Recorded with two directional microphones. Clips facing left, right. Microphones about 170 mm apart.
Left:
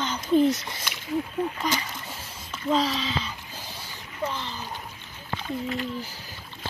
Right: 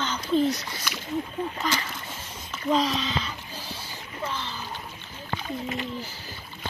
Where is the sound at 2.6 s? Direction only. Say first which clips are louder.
Even; centre (ahead or behind).